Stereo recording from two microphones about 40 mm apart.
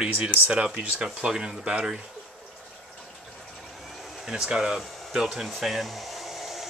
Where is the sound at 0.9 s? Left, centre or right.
Right.